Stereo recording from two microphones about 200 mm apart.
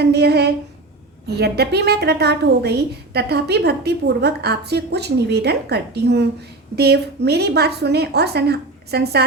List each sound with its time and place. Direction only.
0.0 s a woman's voice: 55° right (ahead or behind)